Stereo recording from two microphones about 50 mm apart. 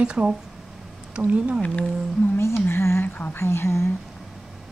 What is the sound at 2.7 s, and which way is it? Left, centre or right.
Speech, left.